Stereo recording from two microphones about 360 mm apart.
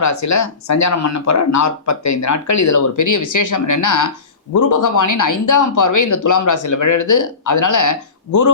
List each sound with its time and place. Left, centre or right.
0.0 s speech: left